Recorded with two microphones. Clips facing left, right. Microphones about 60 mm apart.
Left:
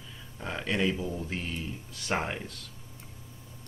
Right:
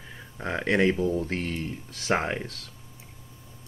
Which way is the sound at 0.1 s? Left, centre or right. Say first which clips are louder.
Right 6 dB; right.